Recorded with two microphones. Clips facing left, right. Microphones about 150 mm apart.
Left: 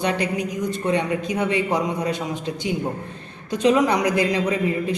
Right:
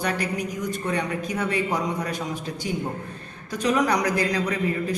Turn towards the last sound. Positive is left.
turn(degrees=20)  # may be behind; listen again after turning